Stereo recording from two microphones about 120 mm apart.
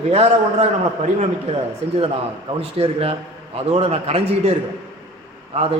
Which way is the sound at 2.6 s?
55° right (ahead or behind).